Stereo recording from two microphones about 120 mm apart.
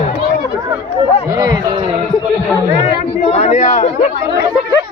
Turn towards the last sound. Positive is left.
turn(degrees=65)  # may be behind; listen again after turning